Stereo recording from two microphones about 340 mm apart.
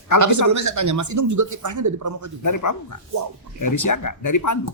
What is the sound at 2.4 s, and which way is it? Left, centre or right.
Speech, left.